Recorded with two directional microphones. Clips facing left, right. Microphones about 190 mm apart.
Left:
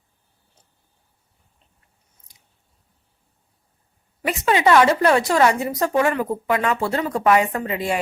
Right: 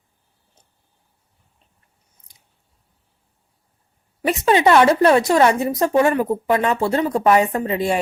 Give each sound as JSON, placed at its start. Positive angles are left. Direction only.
{"t": 4.3, "sound": "a woman's voice", "side_deg": -30}